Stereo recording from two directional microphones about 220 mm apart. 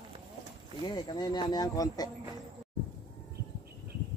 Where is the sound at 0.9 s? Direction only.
20° left (ahead or behind).